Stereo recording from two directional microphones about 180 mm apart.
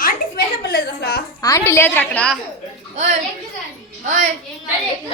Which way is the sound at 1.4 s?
15° left (ahead or behind).